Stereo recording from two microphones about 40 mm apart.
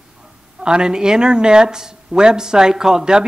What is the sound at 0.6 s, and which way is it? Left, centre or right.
Speech, right.